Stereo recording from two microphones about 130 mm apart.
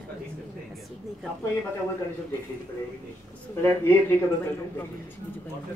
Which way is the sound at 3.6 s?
20° left (ahead or behind).